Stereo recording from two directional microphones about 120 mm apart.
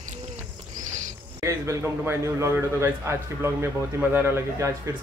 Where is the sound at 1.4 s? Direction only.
25° right (ahead or behind).